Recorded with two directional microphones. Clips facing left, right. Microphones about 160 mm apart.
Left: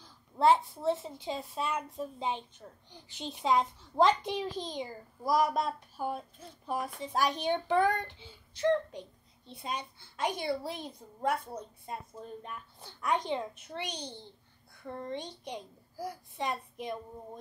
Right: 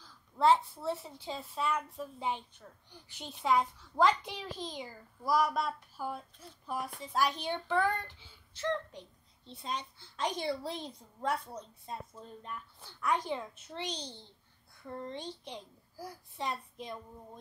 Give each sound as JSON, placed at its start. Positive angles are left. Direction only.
{"t": 0.0, "sound": "a child's voice", "side_deg": 15}
{"t": 15.0, "sound": "speech", "side_deg": 15}